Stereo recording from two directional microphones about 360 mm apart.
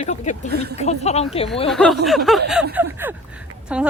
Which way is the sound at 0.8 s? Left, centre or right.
Centre.